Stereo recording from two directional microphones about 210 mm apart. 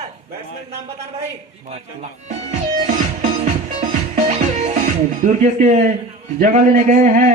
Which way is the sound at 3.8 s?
35° right (ahead or behind).